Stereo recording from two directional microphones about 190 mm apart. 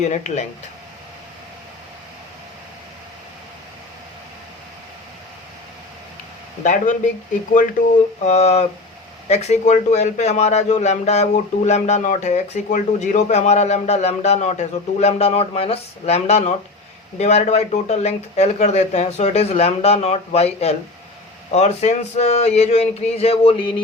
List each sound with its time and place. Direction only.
0.0 s a man's voice: 35° left (ahead or behind)
6.6 s a man's voice: 40° left (ahead or behind)
8.2 s a man's voice: 35° left (ahead or behind)